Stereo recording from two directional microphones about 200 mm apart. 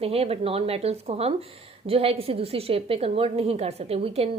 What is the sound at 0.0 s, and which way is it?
Speech, 30° right (ahead or behind).